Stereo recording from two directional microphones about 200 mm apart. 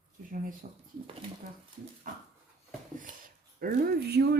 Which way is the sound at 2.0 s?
40° right (ahead or behind).